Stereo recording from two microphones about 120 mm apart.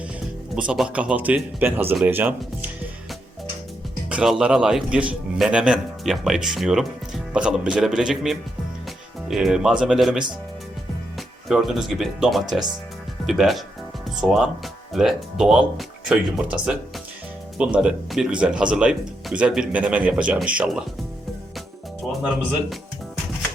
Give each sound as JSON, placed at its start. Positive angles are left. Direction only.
{"t": 0.7, "sound": "speech", "side_deg": -10}
{"t": 4.1, "sound": "a man's voice", "side_deg": -5}
{"t": 11.4, "sound": "a man's voice", "side_deg": 0}